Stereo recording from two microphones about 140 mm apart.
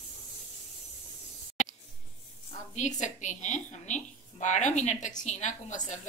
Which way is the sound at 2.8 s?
60° left (ahead or behind).